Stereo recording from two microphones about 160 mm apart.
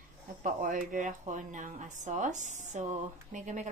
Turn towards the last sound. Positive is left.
turn(degrees=-50)  # may be behind; listen again after turning